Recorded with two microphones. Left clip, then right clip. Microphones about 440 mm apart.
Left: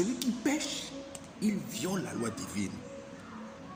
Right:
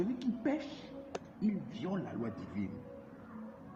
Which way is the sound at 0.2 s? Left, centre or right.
Right.